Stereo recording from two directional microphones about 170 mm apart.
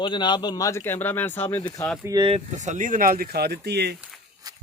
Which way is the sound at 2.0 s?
25° right (ahead or behind).